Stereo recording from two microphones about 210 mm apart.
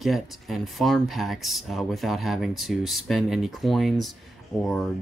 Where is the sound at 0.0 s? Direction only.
Centre (ahead or behind).